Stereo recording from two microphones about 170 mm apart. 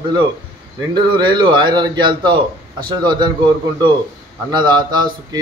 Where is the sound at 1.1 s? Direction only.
25° right (ahead or behind).